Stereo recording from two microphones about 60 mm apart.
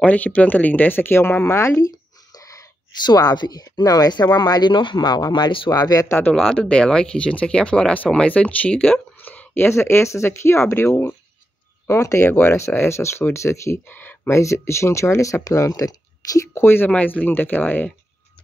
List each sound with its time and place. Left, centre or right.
0.0 s speech: left
1.8 s a sound: left
3.2 s speech: left
6.0 s speech: left
6.3 s speech: centre
9.2 s speech: left
11.9 s speech: left
12.3 s speech: left
12.5 s speech: left
13.8 s a sound: left
14.3 s speech: left
15.5 s speech: left
16.5 s speech: left
16.9 s speech: left